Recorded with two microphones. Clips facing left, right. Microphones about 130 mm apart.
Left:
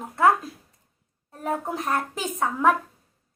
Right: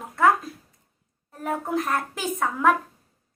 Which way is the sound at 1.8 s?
25° left (ahead or behind).